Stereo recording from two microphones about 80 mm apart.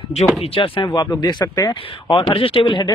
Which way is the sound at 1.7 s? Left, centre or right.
Left.